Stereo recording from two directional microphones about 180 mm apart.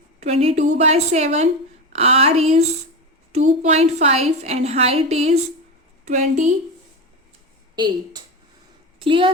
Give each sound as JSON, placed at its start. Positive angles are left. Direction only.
{"t": 0.2, "sound": "a woman's voice", "side_deg": -35}
{"t": 9.0, "sound": "a woman's voice", "side_deg": -30}